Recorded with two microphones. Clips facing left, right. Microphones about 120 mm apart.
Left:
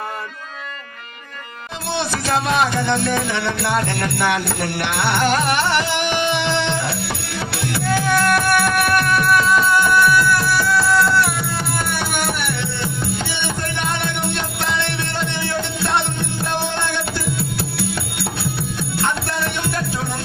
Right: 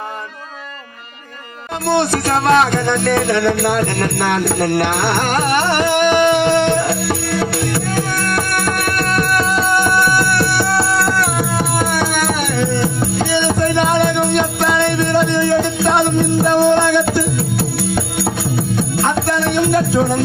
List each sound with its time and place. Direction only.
1.9 s music: 55° right (ahead or behind)
10.2 s music: 70° right (ahead or behind); by 14.0 s 50° right (ahead or behind)
15.2 s music: 55° right (ahead or behind)
18.5 s music: 55° right (ahead or behind)